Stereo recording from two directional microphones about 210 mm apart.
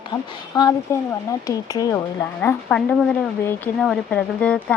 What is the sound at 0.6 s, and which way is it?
Speech, 20° left (ahead or behind).